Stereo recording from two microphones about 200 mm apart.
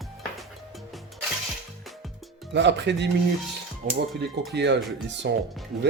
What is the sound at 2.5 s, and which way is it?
Speech, 60° right (ahead or behind).